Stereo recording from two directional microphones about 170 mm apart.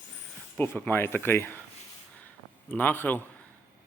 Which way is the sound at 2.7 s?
10° left (ahead or behind).